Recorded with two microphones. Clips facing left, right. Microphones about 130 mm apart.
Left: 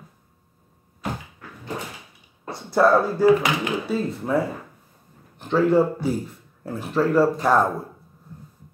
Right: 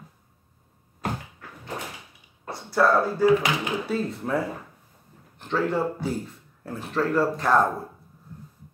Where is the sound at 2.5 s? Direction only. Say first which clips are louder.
Left 3 dB; 20° left (ahead or behind).